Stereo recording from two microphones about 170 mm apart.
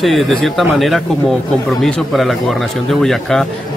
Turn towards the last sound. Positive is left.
turn(degrees=0)  # may be behind; listen again after turning